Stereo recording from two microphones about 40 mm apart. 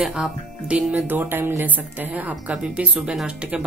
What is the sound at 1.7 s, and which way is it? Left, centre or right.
Speech, right.